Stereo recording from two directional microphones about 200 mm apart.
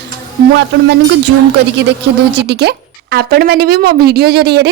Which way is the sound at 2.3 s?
60° right (ahead or behind).